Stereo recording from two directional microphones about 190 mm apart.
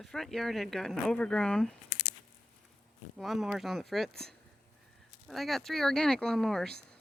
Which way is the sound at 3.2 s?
Centre (ahead or behind).